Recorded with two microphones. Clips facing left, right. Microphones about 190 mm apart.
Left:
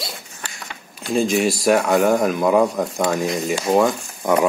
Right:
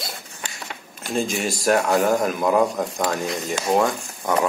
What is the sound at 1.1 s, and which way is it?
A man's voice, centre (ahead or behind).